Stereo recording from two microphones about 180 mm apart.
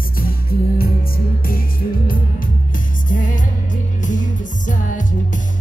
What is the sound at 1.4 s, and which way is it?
Music, 55° left (ahead or behind).